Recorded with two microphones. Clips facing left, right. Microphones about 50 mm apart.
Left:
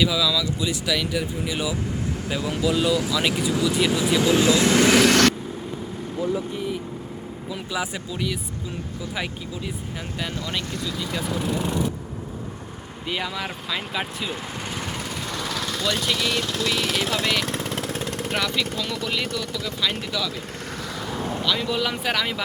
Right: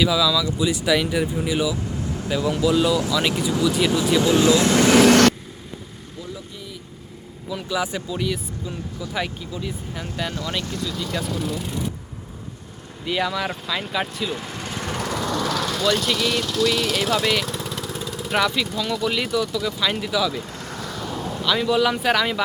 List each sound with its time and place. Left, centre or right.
0.0 s speech: centre
0.6 s speech: centre
2.1 s speech: centre
6.1 s speech: left
7.5 s speech: centre
8.1 s speech: centre
13.1 s speech: centre
14.8 s vehicle: centre
15.8 s speech: centre
17.4 s lawn mower: left
18.3 s speech: centre
21.2 s vehicle: left
21.4 s speech: centre